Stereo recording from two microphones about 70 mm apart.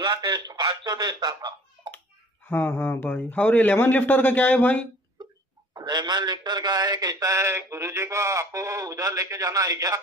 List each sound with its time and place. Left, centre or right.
0.0 s speech: right
1.8 s a sound: right
2.4 s speech: left
5.8 s a man's voice: right